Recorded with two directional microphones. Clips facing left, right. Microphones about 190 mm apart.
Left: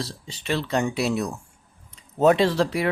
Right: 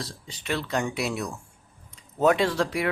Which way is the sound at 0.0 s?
30° left (ahead or behind).